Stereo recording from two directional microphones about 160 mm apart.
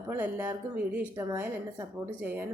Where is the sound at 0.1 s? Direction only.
15° right (ahead or behind).